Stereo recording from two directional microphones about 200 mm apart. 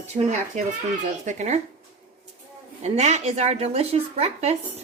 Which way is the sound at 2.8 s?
35° right (ahead or behind).